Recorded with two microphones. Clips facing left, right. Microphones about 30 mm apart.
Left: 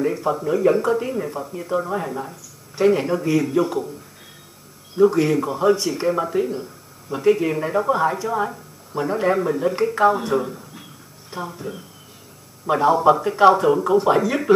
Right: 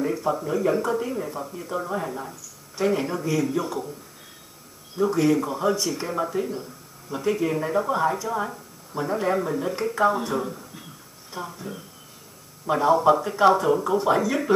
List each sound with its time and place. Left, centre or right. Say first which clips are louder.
0.0 s speech: left 3 dB; centre
5.0 s a man's voice: left 8 dB; left
5.3 s speech: left 4 dB; centre